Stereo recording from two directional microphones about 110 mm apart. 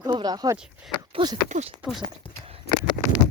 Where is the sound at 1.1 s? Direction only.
55° right (ahead or behind).